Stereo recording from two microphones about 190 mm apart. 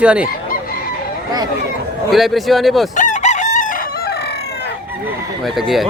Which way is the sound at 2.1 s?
Centre (ahead or behind).